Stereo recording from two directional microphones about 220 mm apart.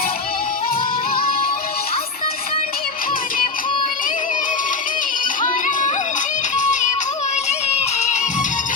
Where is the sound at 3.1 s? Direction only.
40° left (ahead or behind).